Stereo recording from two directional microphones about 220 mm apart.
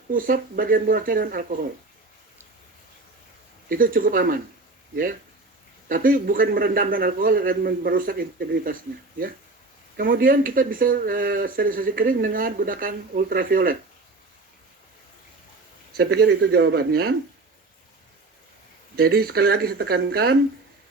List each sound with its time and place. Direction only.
0.1 s speech: 40° right (ahead or behind)
3.7 s speech: 40° right (ahead or behind)
5.9 s speech: 40° right (ahead or behind)
15.9 s speech: 45° right (ahead or behind)
18.9 s speech: 45° right (ahead or behind)